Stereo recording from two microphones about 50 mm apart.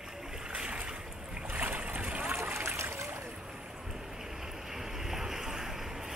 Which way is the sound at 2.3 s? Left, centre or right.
Right.